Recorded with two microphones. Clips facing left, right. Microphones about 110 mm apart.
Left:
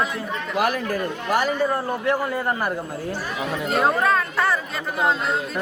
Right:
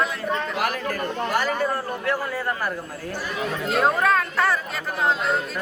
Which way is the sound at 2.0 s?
20° left (ahead or behind).